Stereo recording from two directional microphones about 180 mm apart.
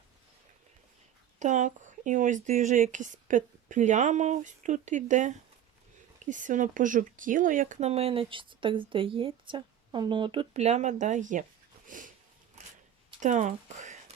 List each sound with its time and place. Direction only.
1.4 s speech: 45° right (ahead or behind)
11.9 s sniff: 45° right (ahead or behind)
13.1 s speech: 45° right (ahead or behind)